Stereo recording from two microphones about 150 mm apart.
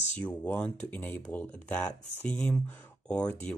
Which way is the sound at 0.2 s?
10° left (ahead or behind).